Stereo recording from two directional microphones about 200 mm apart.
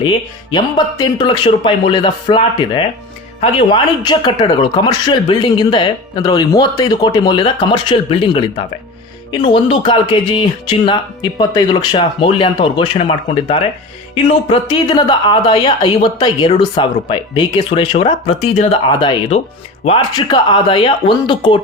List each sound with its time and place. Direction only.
0.0 s speech: 20° left (ahead or behind)